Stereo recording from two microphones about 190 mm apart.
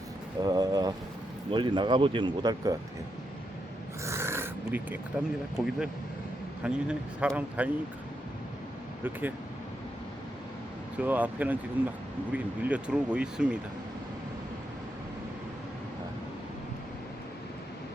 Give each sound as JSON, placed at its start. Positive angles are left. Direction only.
{"t": 0.4, "sound": "speech", "side_deg": -20}
{"t": 4.0, "sound": "a sound", "side_deg": -15}
{"t": 5.6, "sound": "speech", "side_deg": -5}
{"t": 10.9, "sound": "speech", "side_deg": -10}